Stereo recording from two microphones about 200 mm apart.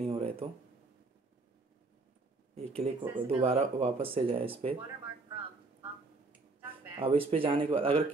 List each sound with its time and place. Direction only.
0.0 s a sound: 30° right (ahead or behind)
2.5 s speech: 30° right (ahead or behind)
7.0 s speech: 25° right (ahead or behind)